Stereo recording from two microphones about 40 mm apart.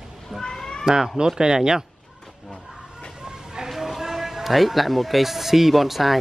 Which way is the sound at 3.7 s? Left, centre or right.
Centre.